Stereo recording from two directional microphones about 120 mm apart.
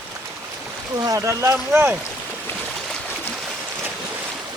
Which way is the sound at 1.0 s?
25° right (ahead or behind).